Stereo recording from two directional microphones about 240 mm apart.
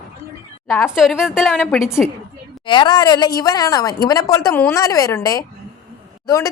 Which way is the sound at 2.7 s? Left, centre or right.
Centre.